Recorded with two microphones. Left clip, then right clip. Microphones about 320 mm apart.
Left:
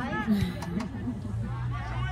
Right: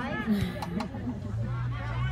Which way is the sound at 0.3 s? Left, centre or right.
Right.